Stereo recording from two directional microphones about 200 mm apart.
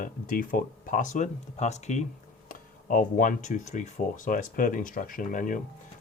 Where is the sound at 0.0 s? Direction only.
45° left (ahead or behind).